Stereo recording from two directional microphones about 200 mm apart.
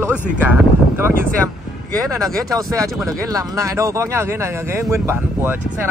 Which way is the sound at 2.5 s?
15° right (ahead or behind).